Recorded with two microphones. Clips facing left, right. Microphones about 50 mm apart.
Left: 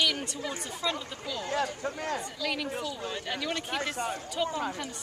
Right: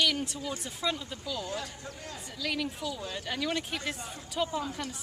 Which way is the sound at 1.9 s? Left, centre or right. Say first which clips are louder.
Left 10 dB; left.